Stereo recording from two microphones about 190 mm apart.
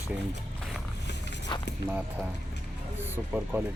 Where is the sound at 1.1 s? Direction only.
65° left (ahead or behind).